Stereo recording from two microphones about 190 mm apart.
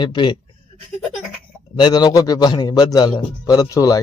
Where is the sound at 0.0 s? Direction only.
25° left (ahead or behind).